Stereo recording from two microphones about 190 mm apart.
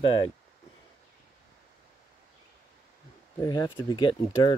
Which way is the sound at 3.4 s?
20° left (ahead or behind).